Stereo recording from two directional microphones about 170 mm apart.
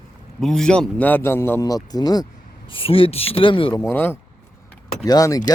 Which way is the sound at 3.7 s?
15° left (ahead or behind).